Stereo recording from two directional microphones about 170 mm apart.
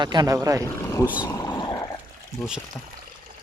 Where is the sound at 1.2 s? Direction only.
20° left (ahead or behind).